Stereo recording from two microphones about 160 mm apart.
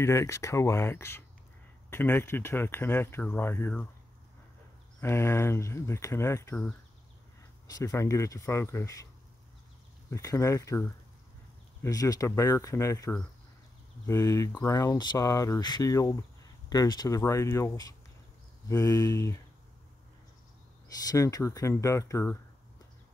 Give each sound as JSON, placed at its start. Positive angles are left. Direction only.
{"t": 0.0, "sound": "speech", "side_deg": 20}
{"t": 5.0, "sound": "speech", "side_deg": 15}
{"t": 10.0, "sound": "speech", "side_deg": 20}
{"t": 21.1, "sound": "speech", "side_deg": 20}